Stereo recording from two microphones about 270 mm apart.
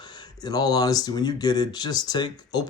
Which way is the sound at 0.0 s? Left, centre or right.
Centre.